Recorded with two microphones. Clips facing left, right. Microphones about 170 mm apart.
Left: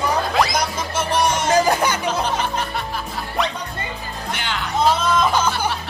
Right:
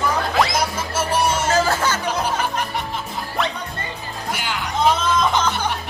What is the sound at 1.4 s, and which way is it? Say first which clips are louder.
Music: left 2 dB; 15° left (ahead or behind).